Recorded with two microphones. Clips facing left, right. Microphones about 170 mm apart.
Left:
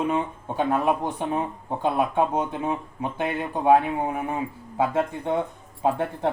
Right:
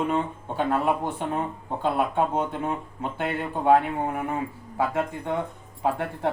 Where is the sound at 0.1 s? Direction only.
15° left (ahead or behind).